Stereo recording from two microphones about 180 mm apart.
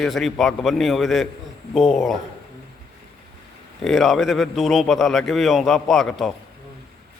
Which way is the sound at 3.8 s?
Centre (ahead or behind).